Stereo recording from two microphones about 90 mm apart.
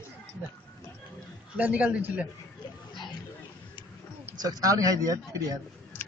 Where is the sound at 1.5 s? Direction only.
15° right (ahead or behind).